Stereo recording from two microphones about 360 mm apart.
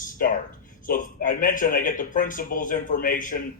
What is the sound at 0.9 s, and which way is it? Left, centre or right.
Speech, left.